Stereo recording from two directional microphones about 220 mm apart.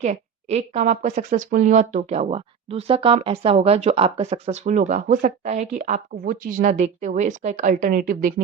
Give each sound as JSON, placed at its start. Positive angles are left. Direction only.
{"t": 0.0, "sound": "speech", "side_deg": -30}